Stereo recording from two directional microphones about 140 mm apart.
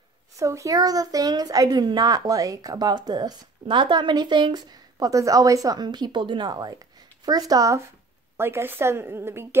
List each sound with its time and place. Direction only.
0.4 s a woman's voice: 20° right (ahead or behind)